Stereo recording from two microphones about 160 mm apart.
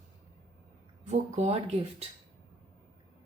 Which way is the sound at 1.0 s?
45° right (ahead or behind).